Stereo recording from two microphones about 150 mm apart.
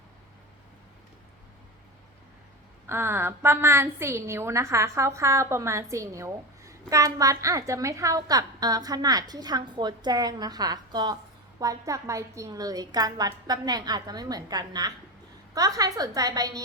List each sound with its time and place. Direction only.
2.9 s a woman's voice: 15° right (ahead or behind)